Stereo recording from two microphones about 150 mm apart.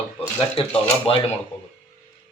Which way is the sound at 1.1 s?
40° left (ahead or behind).